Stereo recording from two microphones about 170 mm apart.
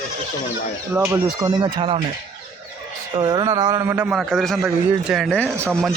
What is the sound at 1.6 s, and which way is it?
Speech, 30° right (ahead or behind).